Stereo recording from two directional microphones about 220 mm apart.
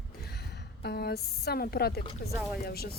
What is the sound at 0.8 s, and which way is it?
Speech, 45° left (ahead or behind).